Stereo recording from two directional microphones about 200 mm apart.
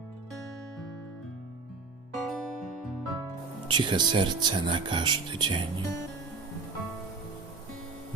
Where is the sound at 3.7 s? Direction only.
25° right (ahead or behind).